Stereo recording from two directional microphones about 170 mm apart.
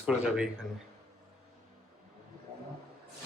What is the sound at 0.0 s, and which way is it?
Speech, 5° right (ahead or behind).